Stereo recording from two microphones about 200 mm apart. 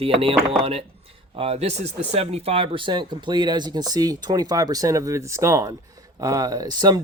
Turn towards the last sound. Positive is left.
turn(degrees=-20)  # may be behind; listen again after turning